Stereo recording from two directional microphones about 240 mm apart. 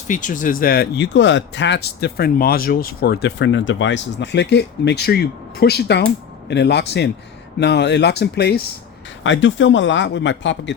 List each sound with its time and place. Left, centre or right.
0.1 s speech: left